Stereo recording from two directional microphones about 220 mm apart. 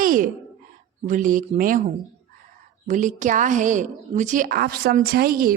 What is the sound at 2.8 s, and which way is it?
A woman's voice, 35° right (ahead or behind).